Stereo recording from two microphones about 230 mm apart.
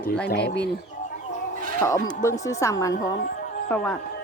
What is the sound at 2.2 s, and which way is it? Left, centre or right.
Speech, centre.